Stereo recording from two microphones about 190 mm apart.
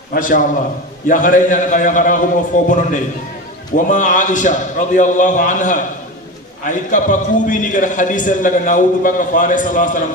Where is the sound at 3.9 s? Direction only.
40° left (ahead or behind).